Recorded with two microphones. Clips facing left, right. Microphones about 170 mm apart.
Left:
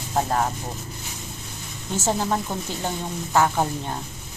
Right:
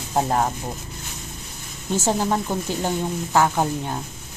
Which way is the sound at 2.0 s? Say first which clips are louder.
Right 1 dB; 10° right (ahead or behind).